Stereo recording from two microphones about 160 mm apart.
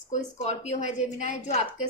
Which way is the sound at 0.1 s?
45° left (ahead or behind).